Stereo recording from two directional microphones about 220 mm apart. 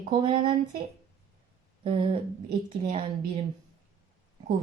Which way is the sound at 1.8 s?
25° right (ahead or behind).